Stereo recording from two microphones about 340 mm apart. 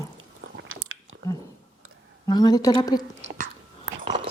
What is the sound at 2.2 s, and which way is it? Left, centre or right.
Speech, centre.